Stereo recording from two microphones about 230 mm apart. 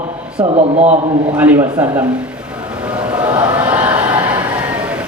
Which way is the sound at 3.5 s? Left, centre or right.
Centre.